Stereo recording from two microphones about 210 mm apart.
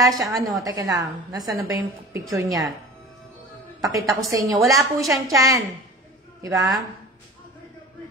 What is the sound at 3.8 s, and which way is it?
Speech, 15° right (ahead or behind).